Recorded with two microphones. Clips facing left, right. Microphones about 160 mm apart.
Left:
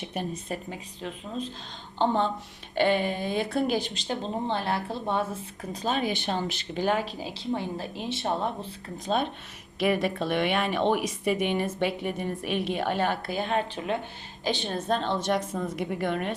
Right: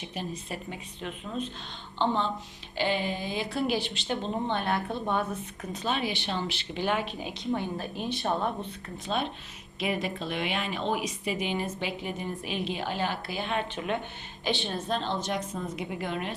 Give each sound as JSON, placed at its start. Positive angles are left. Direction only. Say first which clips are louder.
{"t": 0.0, "sound": "speech", "louder": "left 3 dB", "side_deg": 55}
{"t": 0.7, "sound": "speech", "louder": "left 1 dB", "side_deg": 30}
{"t": 2.0, "sound": "speech", "louder": "left 3 dB", "side_deg": 50}
{"t": 9.0, "sound": "speech", "louder": "left 4 dB", "side_deg": 45}
{"t": 9.8, "sound": "speech", "louder": "left 5 dB", "side_deg": 65}
{"t": 15.9, "sound": "speech", "louder": "left 5 dB", "side_deg": 55}